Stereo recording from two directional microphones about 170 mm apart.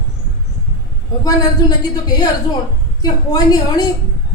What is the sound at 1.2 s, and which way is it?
Speech, 20° left (ahead or behind).